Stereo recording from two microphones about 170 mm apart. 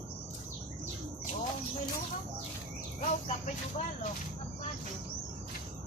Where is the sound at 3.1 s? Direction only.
45° left (ahead or behind).